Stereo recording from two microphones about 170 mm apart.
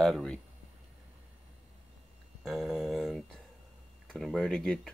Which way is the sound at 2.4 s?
Centre (ahead or behind).